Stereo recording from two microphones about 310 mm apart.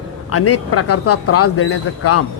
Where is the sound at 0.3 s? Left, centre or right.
Left.